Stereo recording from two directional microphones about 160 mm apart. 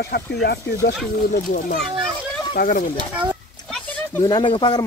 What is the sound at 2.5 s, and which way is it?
Speech, 60° left (ahead or behind).